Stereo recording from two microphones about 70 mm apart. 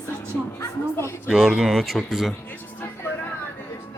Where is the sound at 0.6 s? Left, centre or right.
Left.